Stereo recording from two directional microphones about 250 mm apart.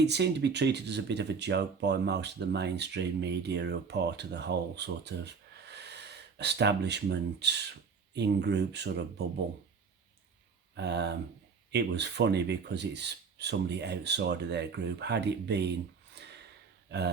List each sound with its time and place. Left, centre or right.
0.0 s speech: right
10.8 s speech: right
16.1 s a sound: right